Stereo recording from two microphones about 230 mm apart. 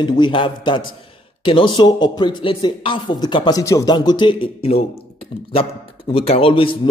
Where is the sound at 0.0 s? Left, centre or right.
Centre.